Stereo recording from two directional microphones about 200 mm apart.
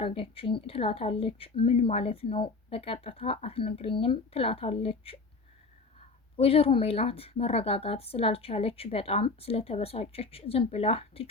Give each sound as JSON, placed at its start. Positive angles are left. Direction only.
{"t": 0.0, "sound": "speech", "side_deg": 30}